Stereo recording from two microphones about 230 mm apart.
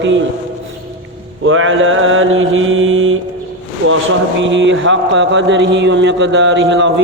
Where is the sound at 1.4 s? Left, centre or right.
Right.